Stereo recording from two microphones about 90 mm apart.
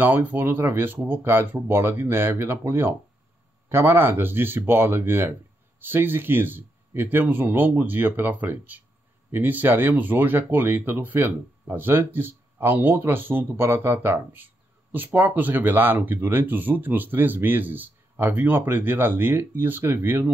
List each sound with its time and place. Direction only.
0.0 s speech: 20° right (ahead or behind)